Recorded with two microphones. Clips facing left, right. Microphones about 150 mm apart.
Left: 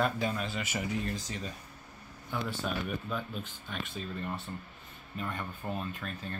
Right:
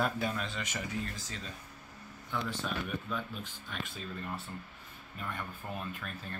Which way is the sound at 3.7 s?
Centre (ahead or behind).